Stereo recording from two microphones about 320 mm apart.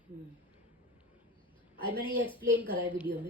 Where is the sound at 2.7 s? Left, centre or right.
Centre.